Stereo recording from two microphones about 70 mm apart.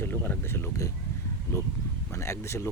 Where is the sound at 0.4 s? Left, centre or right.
Left.